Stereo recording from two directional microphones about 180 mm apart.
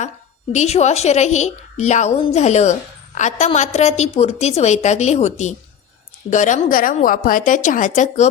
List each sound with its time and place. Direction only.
0.5 s a woman's voice: 40° left (ahead or behind)